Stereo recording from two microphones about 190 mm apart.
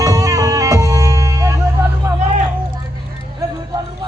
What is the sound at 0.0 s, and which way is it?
Music, 15° right (ahead or behind).